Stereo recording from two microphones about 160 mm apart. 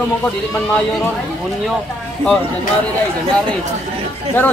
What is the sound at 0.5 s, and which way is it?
Speech, 10° left (ahead or behind).